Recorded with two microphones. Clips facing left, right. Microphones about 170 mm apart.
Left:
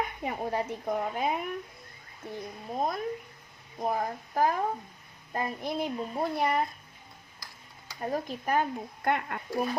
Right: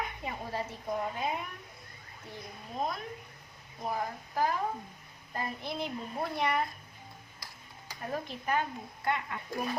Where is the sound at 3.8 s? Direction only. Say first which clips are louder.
Left 5 dB; 50° left (ahead or behind).